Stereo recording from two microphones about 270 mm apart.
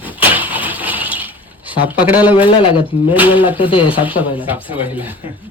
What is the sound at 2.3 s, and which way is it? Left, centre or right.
Speech, centre.